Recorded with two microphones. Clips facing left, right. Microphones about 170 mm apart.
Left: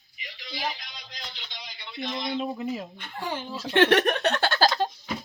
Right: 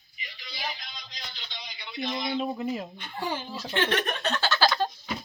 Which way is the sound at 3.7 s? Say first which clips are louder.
Left 8 dB; 65° left (ahead or behind).